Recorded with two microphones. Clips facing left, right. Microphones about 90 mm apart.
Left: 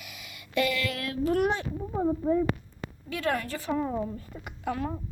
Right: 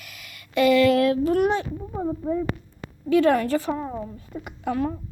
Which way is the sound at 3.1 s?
30° right (ahead or behind).